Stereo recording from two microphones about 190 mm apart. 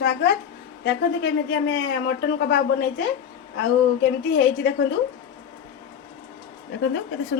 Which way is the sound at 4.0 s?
65° left (ahead or behind).